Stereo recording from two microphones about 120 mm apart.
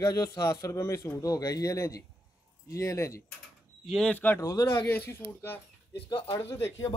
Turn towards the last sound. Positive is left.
turn(degrees=25)  # may be behind; listen again after turning